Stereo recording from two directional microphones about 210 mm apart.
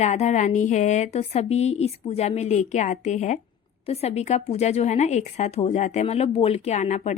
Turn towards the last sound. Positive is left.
turn(degrees=35)  # may be behind; listen again after turning